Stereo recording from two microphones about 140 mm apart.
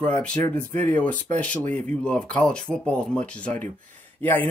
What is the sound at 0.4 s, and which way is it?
Speech, 65° right (ahead or behind).